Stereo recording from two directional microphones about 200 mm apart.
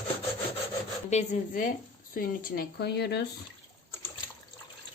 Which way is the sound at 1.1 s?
35° left (ahead or behind).